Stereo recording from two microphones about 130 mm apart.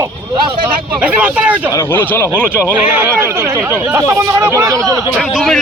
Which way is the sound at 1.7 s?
20° left (ahead or behind).